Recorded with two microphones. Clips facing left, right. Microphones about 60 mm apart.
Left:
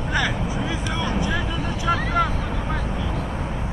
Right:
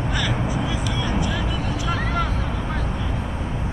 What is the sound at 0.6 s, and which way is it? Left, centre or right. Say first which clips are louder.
Vehicle: even; centre.